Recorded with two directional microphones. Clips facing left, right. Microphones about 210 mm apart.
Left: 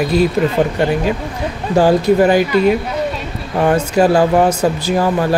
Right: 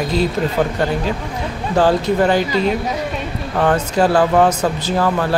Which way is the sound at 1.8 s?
10° left (ahead or behind).